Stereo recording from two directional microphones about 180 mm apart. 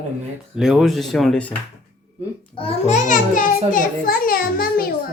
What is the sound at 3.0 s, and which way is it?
A child's voice, 45° left (ahead or behind).